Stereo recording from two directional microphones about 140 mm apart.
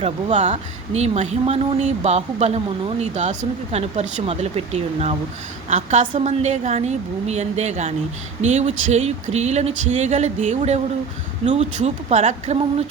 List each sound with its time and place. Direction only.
0.0 s speech: 55° right (ahead or behind)